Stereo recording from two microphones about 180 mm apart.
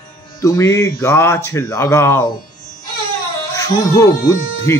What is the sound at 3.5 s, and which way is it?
Speech, 20° left (ahead or behind).